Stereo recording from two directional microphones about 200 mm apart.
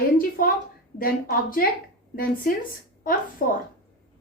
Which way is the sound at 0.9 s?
45° left (ahead or behind).